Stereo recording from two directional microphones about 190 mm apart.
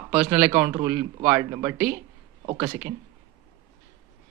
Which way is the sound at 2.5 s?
25° right (ahead or behind).